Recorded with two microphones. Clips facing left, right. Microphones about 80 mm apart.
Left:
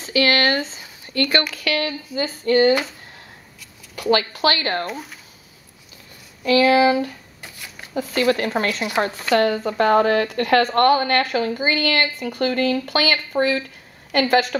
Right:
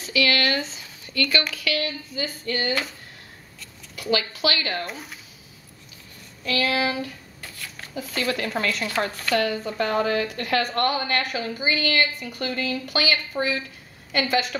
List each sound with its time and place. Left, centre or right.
0.0 s speech: left
2.1 s a sound: left
4.1 s speech: left
4.8 s speech: centre
6.5 s a sound: left
7.9 s speech: left
8.5 s a woman's voice: left
9.4 s a woman's voice: left